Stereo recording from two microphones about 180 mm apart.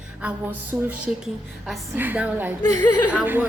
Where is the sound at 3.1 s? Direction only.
10° right (ahead or behind).